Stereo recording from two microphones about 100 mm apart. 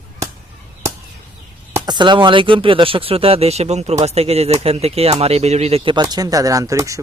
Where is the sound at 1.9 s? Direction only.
50° right (ahead or behind); by 5.9 s 90° right.